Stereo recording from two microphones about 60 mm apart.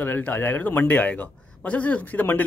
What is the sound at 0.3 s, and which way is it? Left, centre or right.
A man's voice, left.